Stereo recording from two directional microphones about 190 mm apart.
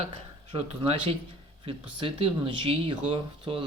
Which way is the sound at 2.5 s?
25° right (ahead or behind).